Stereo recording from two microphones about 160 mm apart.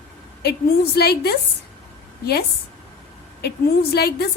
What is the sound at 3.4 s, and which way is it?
Speech, 85° left.